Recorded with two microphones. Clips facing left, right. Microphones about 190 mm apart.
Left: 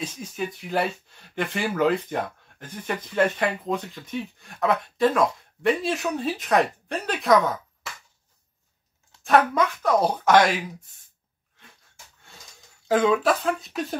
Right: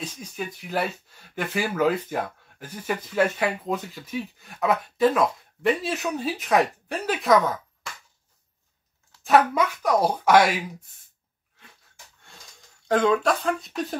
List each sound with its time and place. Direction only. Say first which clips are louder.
0.0 s speech: left 3 dB; centre (ahead or behind)
9.2 s speech: even; 5° right (ahead or behind)
12.2 s a sound: left 1 dB; centre (ahead or behind)